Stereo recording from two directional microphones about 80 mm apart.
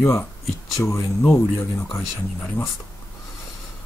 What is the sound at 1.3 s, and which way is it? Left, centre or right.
Speech, left.